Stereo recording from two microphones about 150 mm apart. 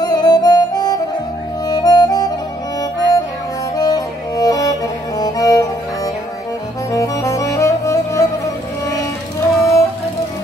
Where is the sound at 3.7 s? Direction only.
25° left (ahead or behind).